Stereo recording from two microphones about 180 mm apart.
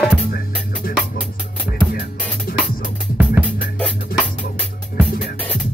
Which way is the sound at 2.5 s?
50° left (ahead or behind).